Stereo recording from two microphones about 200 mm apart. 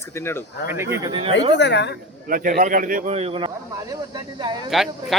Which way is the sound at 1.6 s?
60° left (ahead or behind).